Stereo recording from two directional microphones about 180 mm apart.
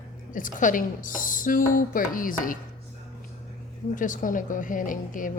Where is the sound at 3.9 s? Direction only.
45° left (ahead or behind).